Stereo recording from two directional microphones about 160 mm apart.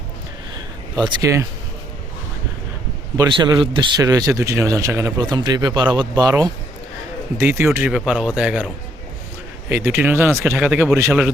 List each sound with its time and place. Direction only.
0.9 s speech: 25° right (ahead or behind)
3.2 s speech: 25° right (ahead or behind); by 11.3 s 10° right (ahead or behind)